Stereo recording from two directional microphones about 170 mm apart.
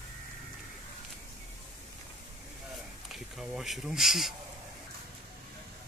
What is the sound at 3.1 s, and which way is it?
Speech, centre (ahead or behind).